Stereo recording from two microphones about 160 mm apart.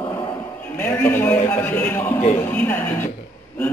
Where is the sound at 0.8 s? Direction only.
10° left (ahead or behind).